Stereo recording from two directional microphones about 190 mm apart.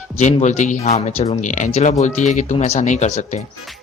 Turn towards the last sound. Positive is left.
turn(degrees=40)  # may be behind; listen again after turning